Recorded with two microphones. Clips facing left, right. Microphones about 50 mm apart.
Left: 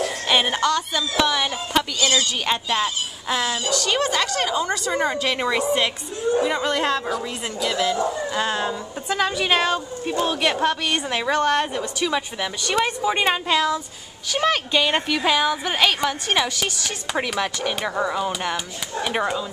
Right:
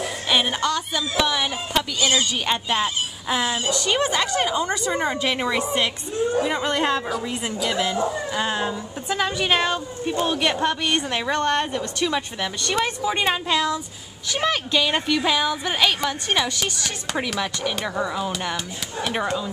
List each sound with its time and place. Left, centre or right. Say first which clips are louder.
0.3 s music: left 1 dB; centre
0.6 s a woman's voice: left 2 dB; centre
2.0 s a woman's voice: even; right
7.1 s a woman's voice: even; centre
7.7 s a woman's voice: left 2 dB; centre